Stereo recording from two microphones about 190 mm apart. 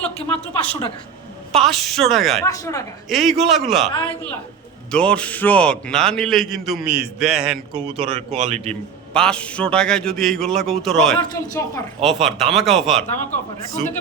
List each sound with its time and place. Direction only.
0.3 s a woman's voice: 10° left (ahead or behind)
2.5 s a woman's voice: 15° left (ahead or behind)
3.1 s a man's voice: centre (ahead or behind)
4.9 s a man's voice: 5° left (ahead or behind)
7.9 s speech: 30° right (ahead or behind)
9.1 s a man's voice: 5° left (ahead or behind)
11.2 s a woman's voice: 15° left (ahead or behind)
12.0 s a man's voice: centre (ahead or behind)